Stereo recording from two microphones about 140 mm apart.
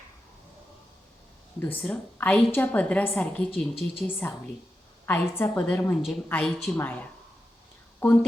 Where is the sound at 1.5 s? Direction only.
15° left (ahead or behind).